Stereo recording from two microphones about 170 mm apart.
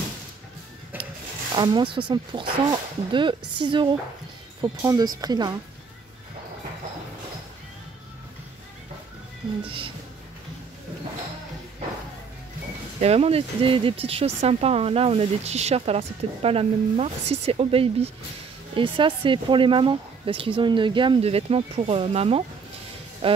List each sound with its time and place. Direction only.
0.9 s rub: 10° right (ahead or behind)
1.5 s speech: 25° right (ahead or behind)
9.7 s speech: 30° right (ahead or behind)
13.0 s speech: 35° right (ahead or behind)